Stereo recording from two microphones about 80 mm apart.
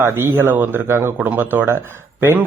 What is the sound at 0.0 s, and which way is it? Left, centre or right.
A man's voice, right.